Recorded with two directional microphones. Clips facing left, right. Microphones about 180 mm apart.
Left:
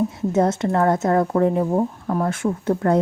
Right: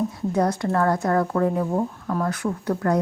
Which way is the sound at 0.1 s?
25° left (ahead or behind).